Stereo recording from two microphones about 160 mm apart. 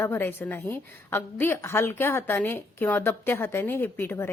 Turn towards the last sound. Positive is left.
turn(degrees=15)  # may be behind; listen again after turning